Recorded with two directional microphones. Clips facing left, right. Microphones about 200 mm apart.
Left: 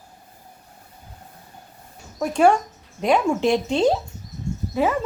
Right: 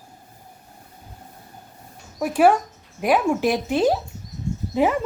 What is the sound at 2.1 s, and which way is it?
Speech, 5° right (ahead or behind).